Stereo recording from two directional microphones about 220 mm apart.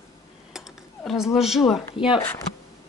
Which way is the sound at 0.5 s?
Centre (ahead or behind).